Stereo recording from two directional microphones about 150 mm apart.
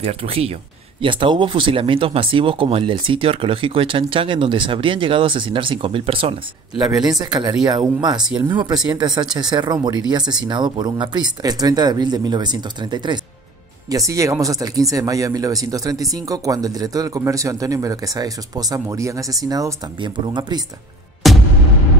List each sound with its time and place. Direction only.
0.0 s speech: 40° right (ahead or behind)
7.2 s speech: 30° right (ahead or behind)
21.2 s music: centre (ahead or behind)